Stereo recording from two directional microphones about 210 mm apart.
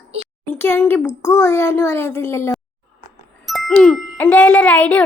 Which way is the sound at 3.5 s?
Centre (ahead or behind).